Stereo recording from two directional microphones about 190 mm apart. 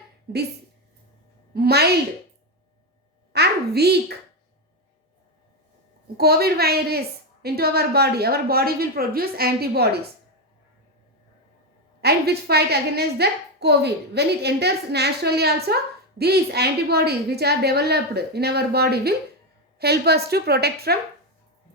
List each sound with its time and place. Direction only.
0.3 s speech: 55° right (ahead or behind)
1.5 s a woman's voice: 55° right (ahead or behind)
3.3 s a woman's voice: 60° right (ahead or behind)
6.1 s a woman's voice: 55° right (ahead or behind)
12.0 s a woman's voice: 55° right (ahead or behind)